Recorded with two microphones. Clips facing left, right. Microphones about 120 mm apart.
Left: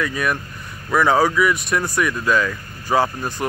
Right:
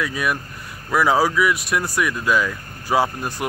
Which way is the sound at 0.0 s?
5° right (ahead or behind).